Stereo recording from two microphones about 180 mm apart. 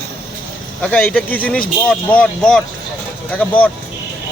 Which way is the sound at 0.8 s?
5° left (ahead or behind).